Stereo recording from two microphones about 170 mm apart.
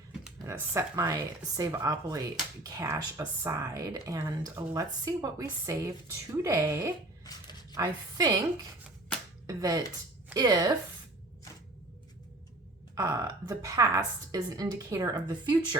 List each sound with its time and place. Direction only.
0.4 s a woman's voice: 15° right (ahead or behind)
7.3 s a sound: 25° left (ahead or behind)
7.8 s a woman's voice: 20° right (ahead or behind)
9.5 s a woman's voice: 20° right (ahead or behind)
13.0 s a woman's voice: 20° right (ahead or behind)